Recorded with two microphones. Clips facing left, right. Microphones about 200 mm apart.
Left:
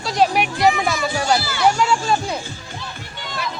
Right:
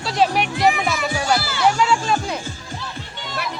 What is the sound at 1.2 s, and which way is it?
Speech, 15° left (ahead or behind).